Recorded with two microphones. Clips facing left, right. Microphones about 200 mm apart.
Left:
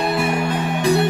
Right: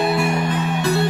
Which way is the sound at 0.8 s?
15° left (ahead or behind).